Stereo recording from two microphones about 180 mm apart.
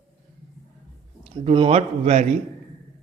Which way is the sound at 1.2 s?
35° right (ahead or behind).